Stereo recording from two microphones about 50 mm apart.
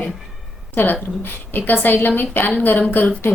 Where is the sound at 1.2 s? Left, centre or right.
Left.